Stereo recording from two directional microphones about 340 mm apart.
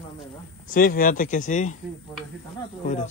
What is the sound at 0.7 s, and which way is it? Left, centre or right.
Speech, left.